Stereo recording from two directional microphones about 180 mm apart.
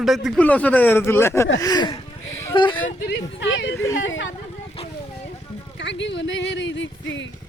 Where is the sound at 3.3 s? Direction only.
85° left.